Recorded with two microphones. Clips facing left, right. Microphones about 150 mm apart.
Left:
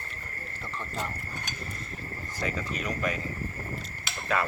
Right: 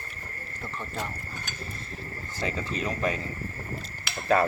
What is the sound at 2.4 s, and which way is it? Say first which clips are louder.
Speech: right 2 dB; 30° right (ahead or behind).